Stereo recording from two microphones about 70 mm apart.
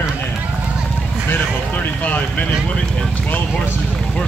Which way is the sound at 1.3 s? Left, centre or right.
Left.